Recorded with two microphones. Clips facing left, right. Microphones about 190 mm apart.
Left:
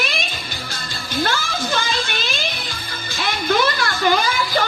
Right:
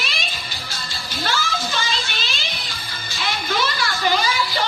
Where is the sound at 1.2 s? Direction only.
55° left (ahead or behind).